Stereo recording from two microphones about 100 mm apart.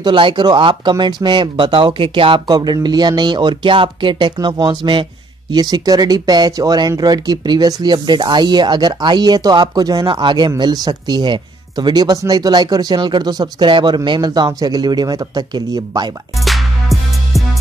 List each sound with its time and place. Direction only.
0.0 s speech: 50° right (ahead or behind)
10.0 s speech: 50° right (ahead or behind)
16.3 s music: centre (ahead or behind)